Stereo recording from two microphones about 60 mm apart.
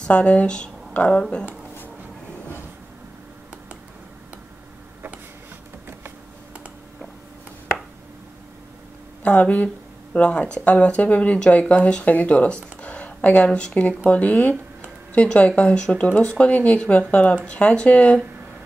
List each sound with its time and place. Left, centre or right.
0.0 s speech: left
9.2 s speech: left